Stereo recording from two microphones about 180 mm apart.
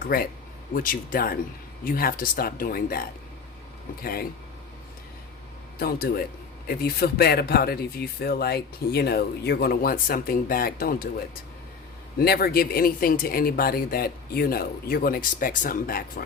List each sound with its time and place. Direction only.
0.0 s speech: 55° left (ahead or behind)
5.8 s speech: 60° left (ahead or behind)
12.2 s speech: 60° left (ahead or behind)